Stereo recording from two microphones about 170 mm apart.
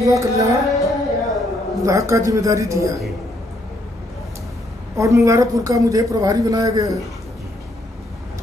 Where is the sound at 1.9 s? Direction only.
20° right (ahead or behind).